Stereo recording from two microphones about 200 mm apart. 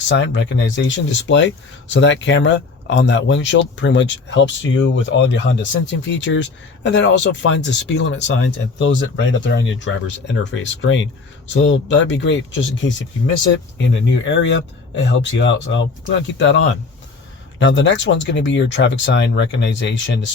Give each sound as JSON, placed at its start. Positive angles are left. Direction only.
{"t": 0.1, "sound": "speech", "side_deg": 60}